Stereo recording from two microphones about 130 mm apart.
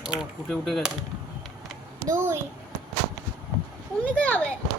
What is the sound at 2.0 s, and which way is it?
Speech, 20° right (ahead or behind).